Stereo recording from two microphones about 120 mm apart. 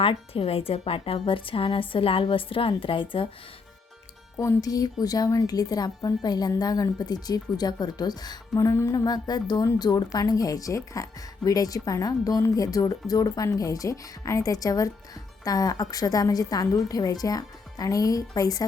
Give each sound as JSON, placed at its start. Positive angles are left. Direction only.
{"t": 0.0, "sound": "a woman's voice", "side_deg": 50}
{"t": 4.4, "sound": "speech", "side_deg": 30}